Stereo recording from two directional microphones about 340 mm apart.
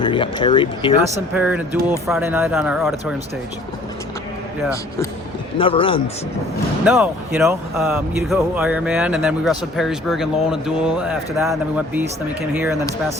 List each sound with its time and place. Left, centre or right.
0.0 s speech: centre
1.1 s speech: centre
5.5 s speech: centre
6.8 s speech: centre